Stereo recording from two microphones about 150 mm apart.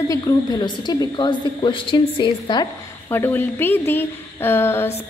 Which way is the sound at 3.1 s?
15° left (ahead or behind).